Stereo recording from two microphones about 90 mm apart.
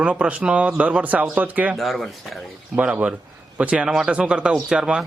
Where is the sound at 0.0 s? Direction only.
10° right (ahead or behind).